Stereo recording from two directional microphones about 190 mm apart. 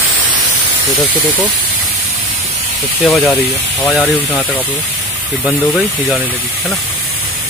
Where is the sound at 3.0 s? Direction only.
5° left (ahead or behind).